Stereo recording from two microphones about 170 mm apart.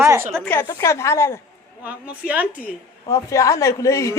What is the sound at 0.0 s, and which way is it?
Speech, 15° right (ahead or behind).